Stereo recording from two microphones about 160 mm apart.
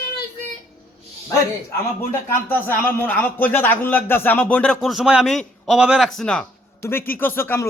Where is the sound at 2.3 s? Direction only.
10° left (ahead or behind).